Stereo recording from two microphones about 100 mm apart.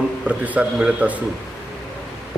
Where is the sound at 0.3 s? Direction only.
15° right (ahead or behind).